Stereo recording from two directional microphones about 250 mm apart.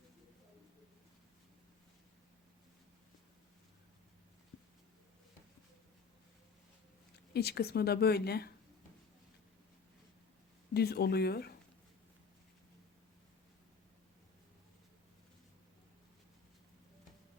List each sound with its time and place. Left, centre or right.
7.3 s speech: left
10.8 s speech: left